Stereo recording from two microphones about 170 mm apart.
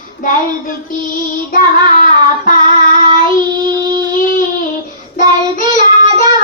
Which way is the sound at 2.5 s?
50° left (ahead or behind).